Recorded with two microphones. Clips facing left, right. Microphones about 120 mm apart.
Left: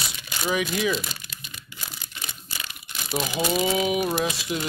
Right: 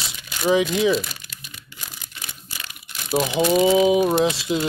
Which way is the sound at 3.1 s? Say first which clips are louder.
Right 7 dB; 30° right (ahead or behind).